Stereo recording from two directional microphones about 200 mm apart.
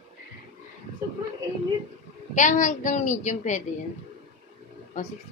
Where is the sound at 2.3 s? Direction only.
40° left (ahead or behind).